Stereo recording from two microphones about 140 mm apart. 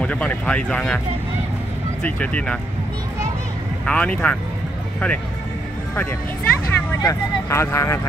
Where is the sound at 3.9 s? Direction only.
5° left (ahead or behind).